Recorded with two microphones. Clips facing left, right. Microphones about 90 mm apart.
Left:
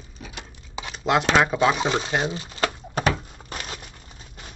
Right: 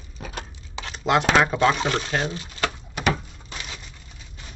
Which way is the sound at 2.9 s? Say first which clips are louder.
Left 1 dB; 45° left (ahead or behind).